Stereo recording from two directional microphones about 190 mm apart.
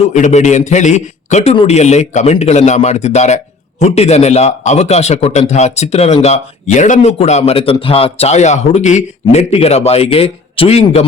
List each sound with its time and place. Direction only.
0.1 s a man's voice: 40° left (ahead or behind)